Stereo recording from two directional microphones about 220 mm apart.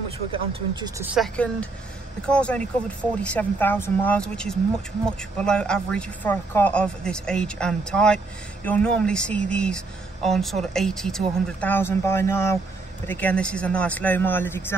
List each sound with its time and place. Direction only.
0.3 s speech: 20° right (ahead or behind)
1.0 s speech: centre (ahead or behind)